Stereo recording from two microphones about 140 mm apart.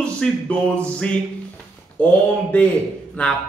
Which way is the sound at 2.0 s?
15° left (ahead or behind).